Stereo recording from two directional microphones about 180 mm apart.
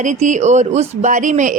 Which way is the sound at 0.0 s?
40° right (ahead or behind).